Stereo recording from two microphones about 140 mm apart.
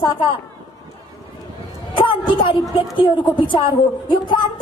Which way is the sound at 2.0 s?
35° left (ahead or behind).